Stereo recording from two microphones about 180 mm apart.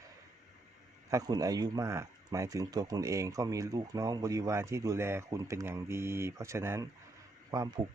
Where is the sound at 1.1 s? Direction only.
20° right (ahead or behind).